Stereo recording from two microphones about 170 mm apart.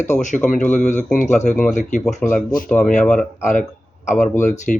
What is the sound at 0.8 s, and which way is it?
Speech, 45° left (ahead or behind).